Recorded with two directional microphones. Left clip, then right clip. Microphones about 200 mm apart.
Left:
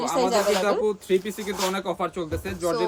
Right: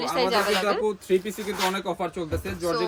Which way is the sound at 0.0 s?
20° left (ahead or behind).